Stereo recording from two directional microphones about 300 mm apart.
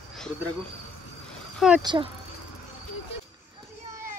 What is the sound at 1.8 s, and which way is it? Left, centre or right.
Speech, centre.